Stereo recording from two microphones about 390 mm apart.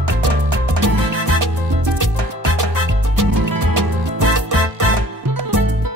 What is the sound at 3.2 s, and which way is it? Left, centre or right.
Music, right.